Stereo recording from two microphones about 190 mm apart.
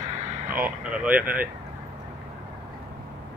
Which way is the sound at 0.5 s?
10° right (ahead or behind).